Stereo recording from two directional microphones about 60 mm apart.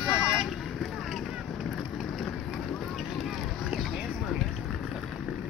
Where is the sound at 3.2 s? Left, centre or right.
Centre.